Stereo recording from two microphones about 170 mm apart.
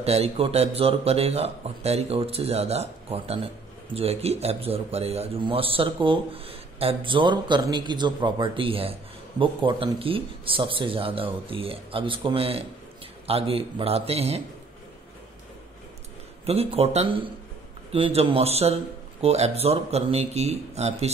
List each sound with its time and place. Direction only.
0.0 s a man's voice: 40° right (ahead or behind)
16.4 s a man's voice: 35° right (ahead or behind)